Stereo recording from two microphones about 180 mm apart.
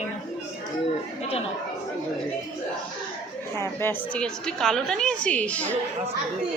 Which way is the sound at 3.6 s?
10° left (ahead or behind).